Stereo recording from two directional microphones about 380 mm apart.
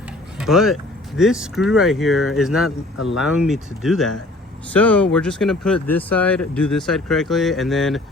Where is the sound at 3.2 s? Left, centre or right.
Centre.